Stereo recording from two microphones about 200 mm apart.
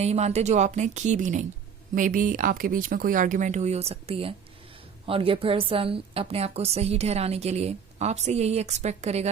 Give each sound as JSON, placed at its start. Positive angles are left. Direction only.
{"t": 0.0, "sound": "a woman's voice", "side_deg": -35}